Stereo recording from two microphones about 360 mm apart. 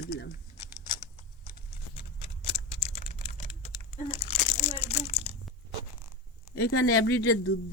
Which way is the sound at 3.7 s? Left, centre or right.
Centre.